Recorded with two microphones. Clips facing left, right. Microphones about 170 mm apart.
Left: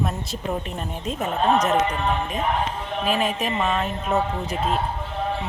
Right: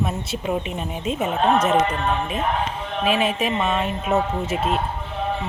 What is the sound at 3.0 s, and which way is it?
Speech, 5° right (ahead or behind).